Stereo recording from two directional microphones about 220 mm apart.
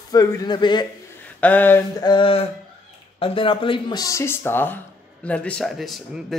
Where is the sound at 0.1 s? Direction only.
15° left (ahead or behind).